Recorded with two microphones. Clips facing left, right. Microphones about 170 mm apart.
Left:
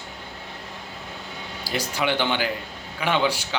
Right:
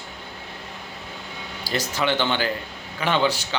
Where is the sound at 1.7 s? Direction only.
10° left (ahead or behind).